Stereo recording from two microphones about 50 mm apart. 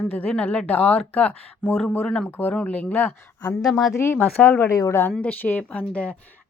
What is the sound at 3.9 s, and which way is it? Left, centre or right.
Speech, left.